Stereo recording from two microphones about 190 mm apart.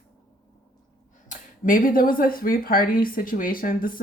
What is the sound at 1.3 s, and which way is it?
Speech, 45° left (ahead or behind).